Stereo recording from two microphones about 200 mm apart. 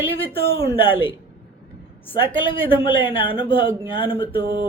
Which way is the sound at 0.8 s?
25° left (ahead or behind).